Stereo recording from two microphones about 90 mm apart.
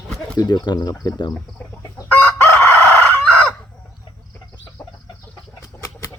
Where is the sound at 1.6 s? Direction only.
20° left (ahead or behind).